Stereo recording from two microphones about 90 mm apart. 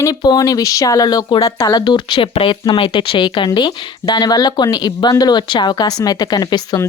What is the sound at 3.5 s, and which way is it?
Speech, 55° left (ahead or behind).